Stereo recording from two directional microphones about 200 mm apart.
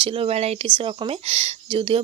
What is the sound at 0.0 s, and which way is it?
Speech, 30° right (ahead or behind).